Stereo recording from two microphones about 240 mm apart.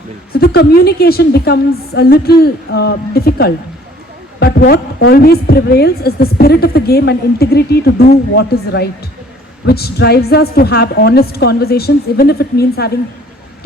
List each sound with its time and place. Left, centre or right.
0.3 s a woman's voice: left